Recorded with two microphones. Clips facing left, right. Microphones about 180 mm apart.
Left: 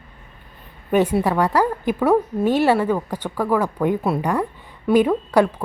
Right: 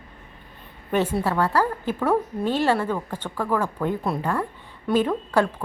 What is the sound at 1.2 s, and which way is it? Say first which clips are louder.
A woman's voice: left 4 dB; 15° left (ahead or behind).